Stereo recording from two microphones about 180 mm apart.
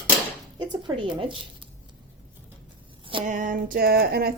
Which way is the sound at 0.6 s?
25° right (ahead or behind).